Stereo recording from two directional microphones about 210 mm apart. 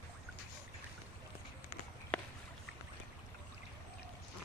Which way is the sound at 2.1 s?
5° left (ahead or behind).